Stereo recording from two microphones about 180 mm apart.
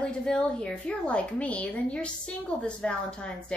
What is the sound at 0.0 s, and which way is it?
A woman's voice, 5° left (ahead or behind).